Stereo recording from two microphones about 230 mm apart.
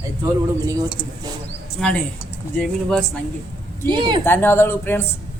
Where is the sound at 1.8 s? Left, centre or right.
Centre.